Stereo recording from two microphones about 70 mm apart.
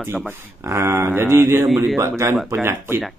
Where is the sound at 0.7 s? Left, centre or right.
Right.